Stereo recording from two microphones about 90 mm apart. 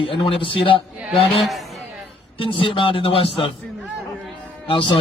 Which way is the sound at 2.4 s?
80° left.